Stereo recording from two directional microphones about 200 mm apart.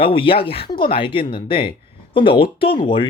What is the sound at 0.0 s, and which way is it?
Speech, 25° left (ahead or behind).